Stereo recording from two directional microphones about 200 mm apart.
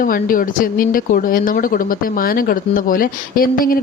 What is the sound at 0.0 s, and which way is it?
A woman's voice, 45° left (ahead or behind).